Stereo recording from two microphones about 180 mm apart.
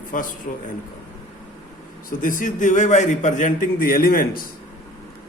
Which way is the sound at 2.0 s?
50° left (ahead or behind).